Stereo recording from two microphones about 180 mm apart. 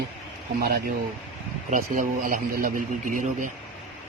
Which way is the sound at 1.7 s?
50° right (ahead or behind).